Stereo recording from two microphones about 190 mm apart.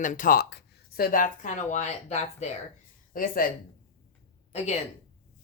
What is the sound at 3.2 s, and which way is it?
Speech, 45° left (ahead or behind).